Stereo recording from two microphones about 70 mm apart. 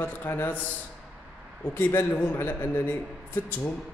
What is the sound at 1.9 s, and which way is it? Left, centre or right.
A man's voice, left.